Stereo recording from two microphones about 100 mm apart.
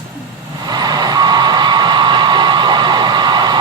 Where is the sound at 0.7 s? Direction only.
45° right (ahead or behind).